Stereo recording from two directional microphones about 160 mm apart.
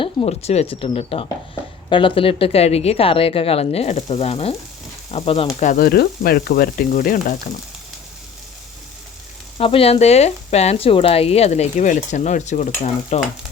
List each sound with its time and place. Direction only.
0.0 s a woman's voice: 35° left (ahead or behind)
5.5 s speech: 50° left (ahead or behind)
5.8 s frying: 75° left (ahead or behind)
9.6 s speech: 35° left (ahead or behind)